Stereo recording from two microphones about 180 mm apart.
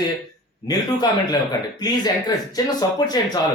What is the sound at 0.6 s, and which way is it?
Speech, 20° left (ahead or behind).